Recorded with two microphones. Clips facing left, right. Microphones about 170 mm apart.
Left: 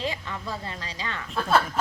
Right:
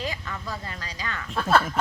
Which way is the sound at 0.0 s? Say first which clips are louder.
Left 1 dB; 25° left (ahead or behind).